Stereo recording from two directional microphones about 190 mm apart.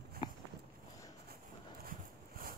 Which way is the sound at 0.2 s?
20° left (ahead or behind).